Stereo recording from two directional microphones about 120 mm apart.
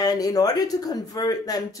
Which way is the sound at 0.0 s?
30° left (ahead or behind).